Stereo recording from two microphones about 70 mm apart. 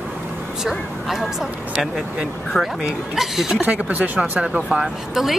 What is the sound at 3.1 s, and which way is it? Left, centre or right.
Speech, centre.